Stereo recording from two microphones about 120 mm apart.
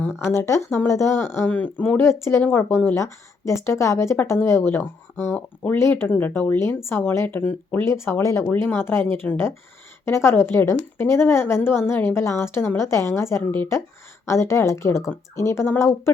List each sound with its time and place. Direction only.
0.0 s a woman's voice: 20° left (ahead or behind)